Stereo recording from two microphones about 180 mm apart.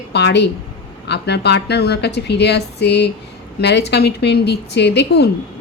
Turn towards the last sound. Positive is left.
turn(degrees=65)  # may be behind; listen again after turning